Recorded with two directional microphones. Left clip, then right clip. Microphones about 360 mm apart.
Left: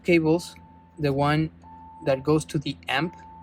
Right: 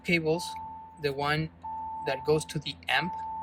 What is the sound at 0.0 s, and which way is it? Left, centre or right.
Speech, centre.